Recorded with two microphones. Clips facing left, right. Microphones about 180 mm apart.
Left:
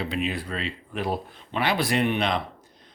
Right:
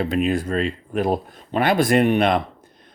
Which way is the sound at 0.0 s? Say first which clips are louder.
Right 8 dB; 45° right (ahead or behind).